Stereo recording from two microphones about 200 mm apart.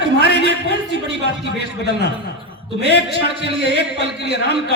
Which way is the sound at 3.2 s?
55° left (ahead or behind).